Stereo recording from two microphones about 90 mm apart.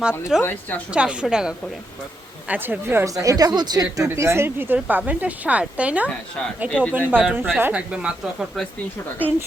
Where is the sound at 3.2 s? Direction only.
40° right (ahead or behind); by 6.1 s 15° right (ahead or behind).